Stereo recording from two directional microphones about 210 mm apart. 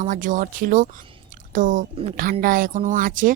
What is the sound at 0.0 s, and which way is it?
Speech, 40° right (ahead or behind).